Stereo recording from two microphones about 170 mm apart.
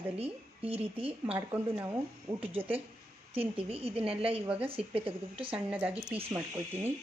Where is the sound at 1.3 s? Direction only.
10° right (ahead or behind).